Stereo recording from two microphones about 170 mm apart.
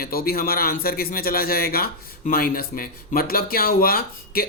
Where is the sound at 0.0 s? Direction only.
60° left (ahead or behind).